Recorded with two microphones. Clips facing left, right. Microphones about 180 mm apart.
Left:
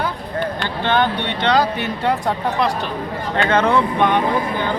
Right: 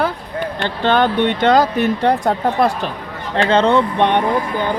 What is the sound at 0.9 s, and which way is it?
Speech, 45° right (ahead or behind).